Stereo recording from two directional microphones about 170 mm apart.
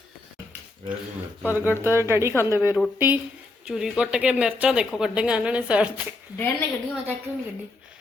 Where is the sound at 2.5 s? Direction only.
20° left (ahead or behind).